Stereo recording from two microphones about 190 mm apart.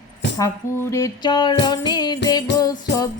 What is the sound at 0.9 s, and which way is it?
Music, 20° left (ahead or behind).